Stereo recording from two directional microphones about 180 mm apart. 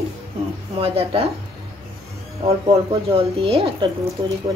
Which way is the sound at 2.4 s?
30° right (ahead or behind).